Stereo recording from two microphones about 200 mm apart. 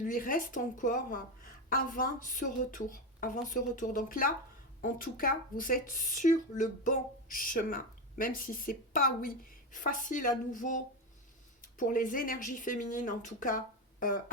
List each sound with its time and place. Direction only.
0.0 s speech: 45° left (ahead or behind)